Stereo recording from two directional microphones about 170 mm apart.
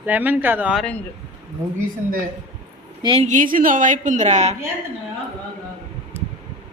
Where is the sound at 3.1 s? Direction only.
40° right (ahead or behind).